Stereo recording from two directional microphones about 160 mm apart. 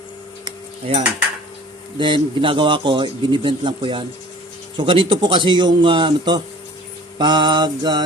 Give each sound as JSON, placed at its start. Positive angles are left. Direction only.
{"t": 0.4, "sound": "cutlery", "side_deg": -35}
{"t": 2.0, "sound": "a man's voice", "side_deg": -30}